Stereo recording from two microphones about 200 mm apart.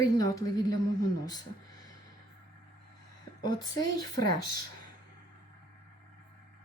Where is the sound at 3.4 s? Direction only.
20° left (ahead or behind).